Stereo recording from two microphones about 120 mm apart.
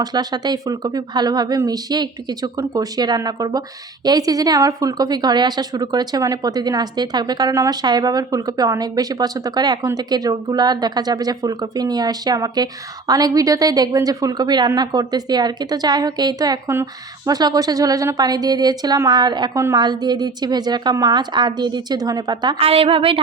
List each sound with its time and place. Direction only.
0.0 s a woman's voice: 35° right (ahead or behind)
22.5 s a woman's voice: 50° right (ahead or behind)